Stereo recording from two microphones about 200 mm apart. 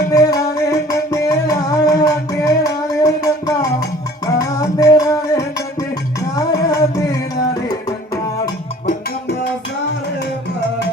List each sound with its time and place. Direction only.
0.1 s music: 20° left (ahead or behind)